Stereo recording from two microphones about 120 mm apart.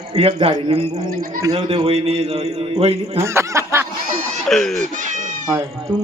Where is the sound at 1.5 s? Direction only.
45° right (ahead or behind).